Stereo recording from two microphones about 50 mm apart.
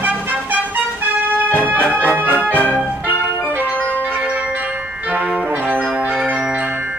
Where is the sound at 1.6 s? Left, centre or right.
Right.